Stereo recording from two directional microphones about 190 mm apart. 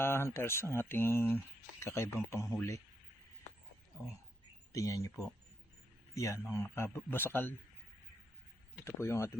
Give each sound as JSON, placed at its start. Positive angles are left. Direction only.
{"t": 0.0, "sound": "speech", "side_deg": 15}
{"t": 4.7, "sound": "speech", "side_deg": 15}
{"t": 8.8, "sound": "speech", "side_deg": 15}